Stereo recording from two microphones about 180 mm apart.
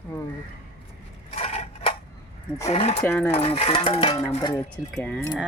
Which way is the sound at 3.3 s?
35° left (ahead or behind).